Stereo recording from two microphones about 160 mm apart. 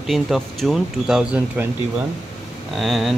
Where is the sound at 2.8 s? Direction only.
Centre (ahead or behind).